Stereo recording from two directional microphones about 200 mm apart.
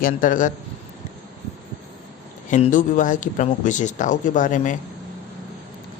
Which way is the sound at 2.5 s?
40° left (ahead or behind).